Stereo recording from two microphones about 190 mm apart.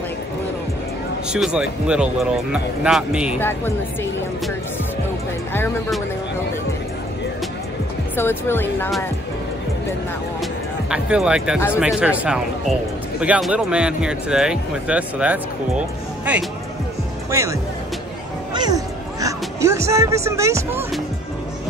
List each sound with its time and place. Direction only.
1.3 s speech: 5° right (ahead or behind)
3.3 s speech: 10° left (ahead or behind)
8.2 s speech: 10° left (ahead or behind)
10.9 s speech: 5° right (ahead or behind)
17.3 s speech: 15° right (ahead or behind)
18.5 s a sound: 20° right (ahead or behind)
19.2 s music: 15° right (ahead or behind)
20.2 s speech: 15° right (ahead or behind)